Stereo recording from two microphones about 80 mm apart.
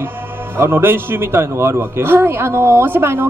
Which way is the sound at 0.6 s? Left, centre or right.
Right.